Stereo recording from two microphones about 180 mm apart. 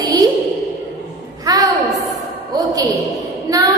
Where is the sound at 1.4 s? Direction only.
20° right (ahead or behind).